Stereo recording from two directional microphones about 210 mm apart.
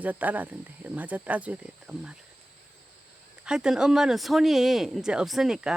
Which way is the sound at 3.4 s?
5° right (ahead or behind).